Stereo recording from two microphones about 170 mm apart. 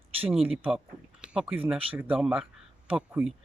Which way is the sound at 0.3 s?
5° right (ahead or behind).